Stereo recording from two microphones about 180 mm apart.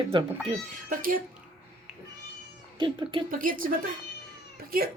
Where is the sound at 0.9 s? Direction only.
50° right (ahead or behind).